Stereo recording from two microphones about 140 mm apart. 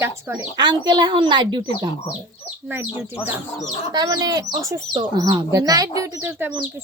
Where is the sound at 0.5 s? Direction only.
30° right (ahead or behind).